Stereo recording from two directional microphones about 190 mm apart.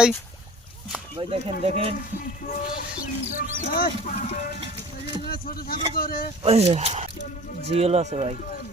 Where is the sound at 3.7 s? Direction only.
50° left (ahead or behind).